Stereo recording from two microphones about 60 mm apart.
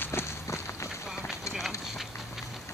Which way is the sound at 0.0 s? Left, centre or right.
Left.